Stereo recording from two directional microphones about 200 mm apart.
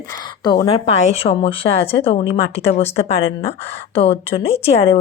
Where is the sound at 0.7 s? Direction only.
30° left (ahead or behind).